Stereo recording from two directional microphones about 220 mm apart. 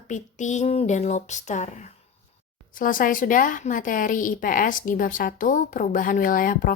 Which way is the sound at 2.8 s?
40° left (ahead or behind).